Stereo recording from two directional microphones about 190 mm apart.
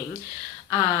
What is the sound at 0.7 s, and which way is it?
Speech, 25° left (ahead or behind).